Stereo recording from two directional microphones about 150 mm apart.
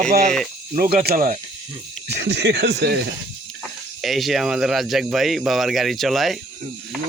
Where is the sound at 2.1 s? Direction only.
90° right.